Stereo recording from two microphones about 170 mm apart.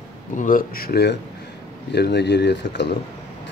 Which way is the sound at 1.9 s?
80° left.